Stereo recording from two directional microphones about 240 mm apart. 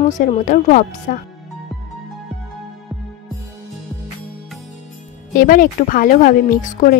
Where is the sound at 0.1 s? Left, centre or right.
Left.